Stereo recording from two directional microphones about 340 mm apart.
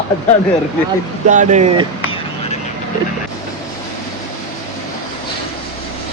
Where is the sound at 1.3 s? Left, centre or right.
Right.